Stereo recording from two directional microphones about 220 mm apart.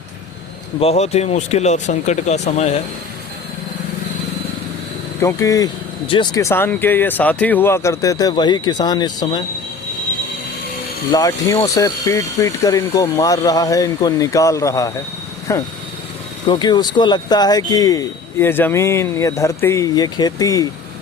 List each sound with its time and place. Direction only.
0.8 s speech: 30° left (ahead or behind)
5.2 s speech: 15° left (ahead or behind)
11.1 s speech: 15° left (ahead or behind)